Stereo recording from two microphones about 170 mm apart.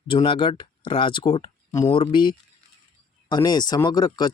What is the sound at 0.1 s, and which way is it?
Speech, 30° left (ahead or behind).